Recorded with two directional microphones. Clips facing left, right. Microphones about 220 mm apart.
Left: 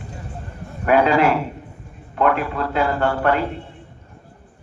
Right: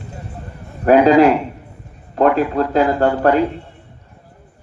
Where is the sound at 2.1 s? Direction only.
35° right (ahead or behind).